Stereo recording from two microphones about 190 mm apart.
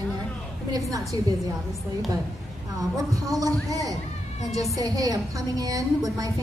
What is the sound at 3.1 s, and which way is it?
A man's voice, 20° right (ahead or behind).